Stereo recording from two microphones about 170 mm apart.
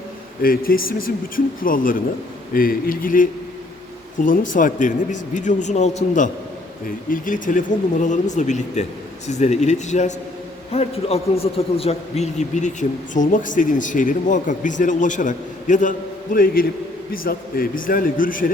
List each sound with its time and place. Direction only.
0.4 s a man's voice: 60° left (ahead or behind)